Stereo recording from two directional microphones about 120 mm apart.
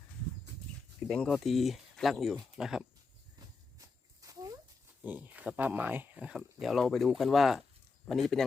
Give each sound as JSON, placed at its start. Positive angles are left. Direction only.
{"t": 1.0, "sound": "speech", "side_deg": 5}
{"t": 3.3, "sound": "a sound", "side_deg": -30}
{"t": 5.0, "sound": "speech", "side_deg": -15}